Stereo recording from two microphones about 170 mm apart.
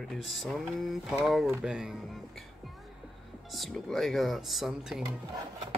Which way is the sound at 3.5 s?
Centre (ahead or behind).